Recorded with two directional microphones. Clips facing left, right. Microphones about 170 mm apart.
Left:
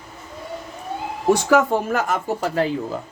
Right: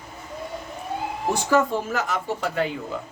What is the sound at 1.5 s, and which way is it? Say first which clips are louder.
Speech: left 4 dB; 65° left (ahead or behind).